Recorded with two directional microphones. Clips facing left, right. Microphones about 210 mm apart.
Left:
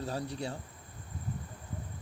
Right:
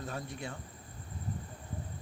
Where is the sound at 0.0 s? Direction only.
35° left (ahead or behind).